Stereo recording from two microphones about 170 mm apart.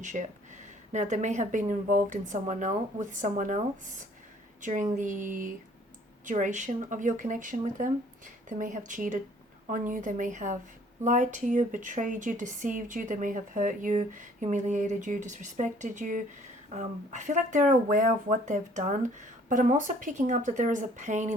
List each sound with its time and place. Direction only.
0.0 s speech: 45° right (ahead or behind)
4.6 s speech: 50° right (ahead or behind)